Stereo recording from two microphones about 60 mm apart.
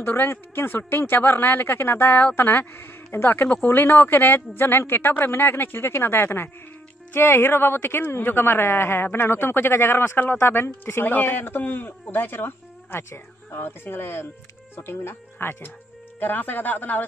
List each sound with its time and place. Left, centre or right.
0.0 s speech: left